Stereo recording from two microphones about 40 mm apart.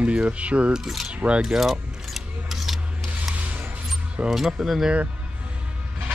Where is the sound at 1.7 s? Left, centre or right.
Centre.